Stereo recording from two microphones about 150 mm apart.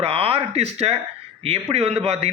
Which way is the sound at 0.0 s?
40° right (ahead or behind).